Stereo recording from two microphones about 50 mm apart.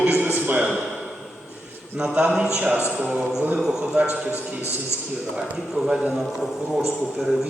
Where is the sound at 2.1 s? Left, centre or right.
Right.